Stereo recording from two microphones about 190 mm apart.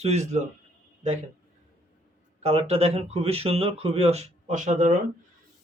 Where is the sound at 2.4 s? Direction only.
30° right (ahead or behind).